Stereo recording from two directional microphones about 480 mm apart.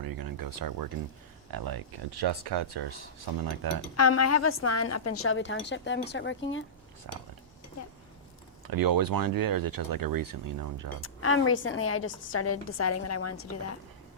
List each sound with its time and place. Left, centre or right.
0.0 s speech: right
3.9 s a woman's voice: left
7.1 s speech: right
8.6 s speech: right
11.0 s a woman's voice: left